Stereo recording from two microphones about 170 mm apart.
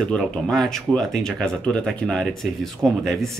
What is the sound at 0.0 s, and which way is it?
Speech, 5° left (ahead or behind).